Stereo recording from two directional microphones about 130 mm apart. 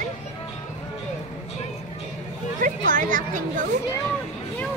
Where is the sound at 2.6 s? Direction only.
90° right.